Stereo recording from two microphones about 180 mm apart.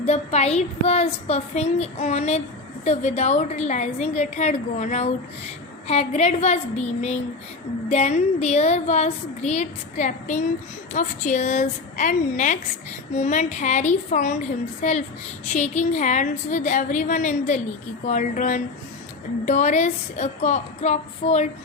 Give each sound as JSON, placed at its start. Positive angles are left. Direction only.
{"t": 0.0, "sound": "a woman's voice", "side_deg": 35}